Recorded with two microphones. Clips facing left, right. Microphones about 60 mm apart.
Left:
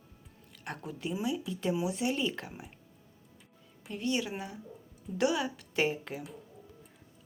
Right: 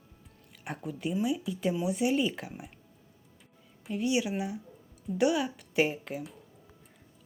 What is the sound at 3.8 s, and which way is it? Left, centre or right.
A woman's voice, centre.